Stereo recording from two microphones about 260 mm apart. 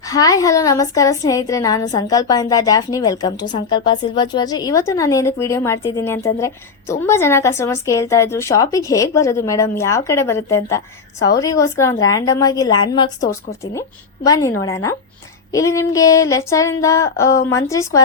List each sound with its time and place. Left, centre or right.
0.0 s a woman's voice: centre
15.5 s a woman's voice: centre